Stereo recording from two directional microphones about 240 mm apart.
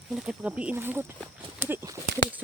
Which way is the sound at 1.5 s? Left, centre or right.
Centre.